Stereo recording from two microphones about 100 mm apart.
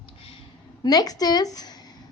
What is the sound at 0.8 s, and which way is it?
Speech, 40° left (ahead or behind).